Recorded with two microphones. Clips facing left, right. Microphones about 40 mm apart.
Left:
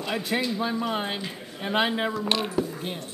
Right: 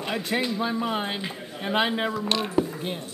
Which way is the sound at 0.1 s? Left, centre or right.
Centre.